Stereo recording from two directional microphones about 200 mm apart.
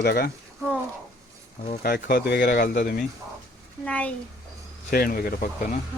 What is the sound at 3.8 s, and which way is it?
Speech, 5° left (ahead or behind).